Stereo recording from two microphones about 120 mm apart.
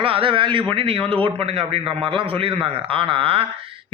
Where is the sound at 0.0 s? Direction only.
50° right (ahead or behind).